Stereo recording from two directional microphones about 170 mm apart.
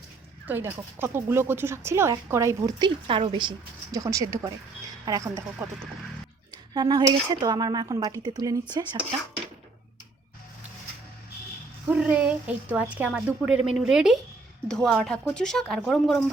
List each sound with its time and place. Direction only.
0.4 s speech: 10° right (ahead or behind)
11.9 s a woman's voice: 10° right (ahead or behind)